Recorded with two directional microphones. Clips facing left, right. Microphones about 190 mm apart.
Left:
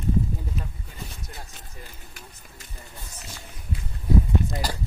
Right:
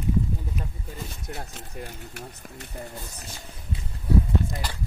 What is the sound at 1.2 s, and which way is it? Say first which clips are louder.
Speech: right 6 dB; 65° right (ahead or behind).